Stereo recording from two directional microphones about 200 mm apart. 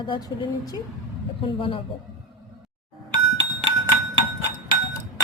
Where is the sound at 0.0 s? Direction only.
20° left (ahead or behind).